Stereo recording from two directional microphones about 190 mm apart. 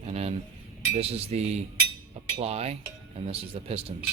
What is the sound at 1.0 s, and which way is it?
Speech, 35° right (ahead or behind).